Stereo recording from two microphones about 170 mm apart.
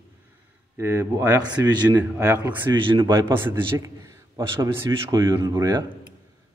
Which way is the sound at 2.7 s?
30° right (ahead or behind).